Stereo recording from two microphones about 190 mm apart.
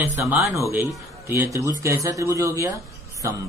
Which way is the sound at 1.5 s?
15° right (ahead or behind).